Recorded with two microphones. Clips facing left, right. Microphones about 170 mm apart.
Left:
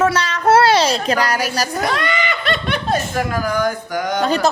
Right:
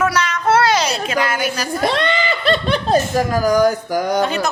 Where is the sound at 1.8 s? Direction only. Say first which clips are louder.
Right 2 dB; 30° right (ahead or behind).